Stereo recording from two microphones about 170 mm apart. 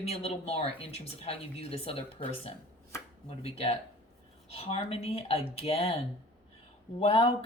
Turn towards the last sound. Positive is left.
turn(degrees=35)  # may be behind; listen again after turning